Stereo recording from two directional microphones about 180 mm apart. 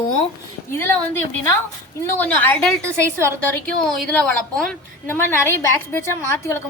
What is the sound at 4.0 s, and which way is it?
A woman's voice, 5° left (ahead or behind).